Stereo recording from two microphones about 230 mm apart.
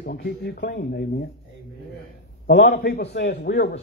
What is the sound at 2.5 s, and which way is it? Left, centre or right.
A man's voice, left.